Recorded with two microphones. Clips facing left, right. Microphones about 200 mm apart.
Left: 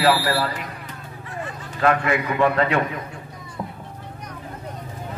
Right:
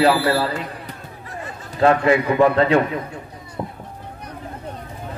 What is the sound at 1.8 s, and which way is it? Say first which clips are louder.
Speech: right 5 dB; 30° right (ahead or behind).